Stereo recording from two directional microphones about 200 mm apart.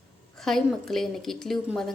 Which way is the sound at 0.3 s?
Centre (ahead or behind).